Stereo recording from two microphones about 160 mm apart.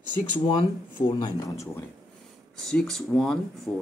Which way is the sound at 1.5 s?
20° left (ahead or behind).